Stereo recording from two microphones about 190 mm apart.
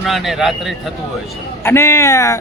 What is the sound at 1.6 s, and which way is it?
Speech, 15° left (ahead or behind).